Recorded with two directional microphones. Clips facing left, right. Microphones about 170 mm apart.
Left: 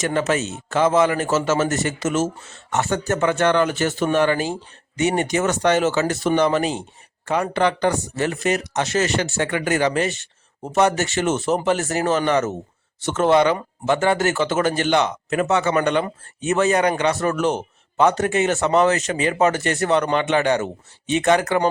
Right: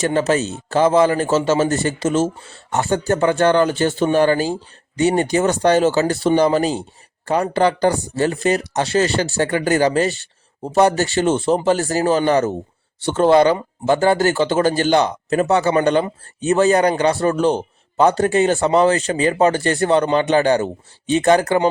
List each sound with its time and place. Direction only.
0.0 s a man's voice: 35° right (ahead or behind)